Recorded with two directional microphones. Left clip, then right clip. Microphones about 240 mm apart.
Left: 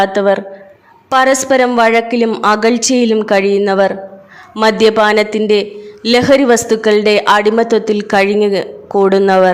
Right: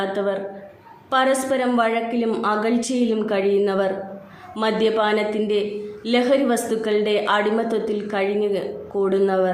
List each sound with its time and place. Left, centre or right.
0.0 s a man's voice: left